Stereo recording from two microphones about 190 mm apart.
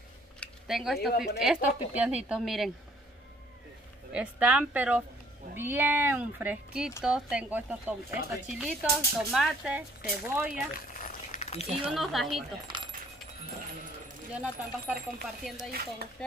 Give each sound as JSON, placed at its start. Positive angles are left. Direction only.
{"t": 0.4, "sound": "a sound", "side_deg": 0}
{"t": 1.1, "sound": "a woman's voice", "side_deg": 55}
{"t": 1.4, "sound": "speech", "side_deg": -5}
{"t": 4.1, "sound": "speech", "side_deg": -5}
{"t": 10.7, "sound": "a sound", "side_deg": 45}
{"t": 11.9, "sound": "speech", "side_deg": 0}
{"t": 12.6, "sound": "keys jangling", "side_deg": -25}
{"t": 14.3, "sound": "speech", "side_deg": -5}
{"t": 15.7, "sound": "speech", "side_deg": -50}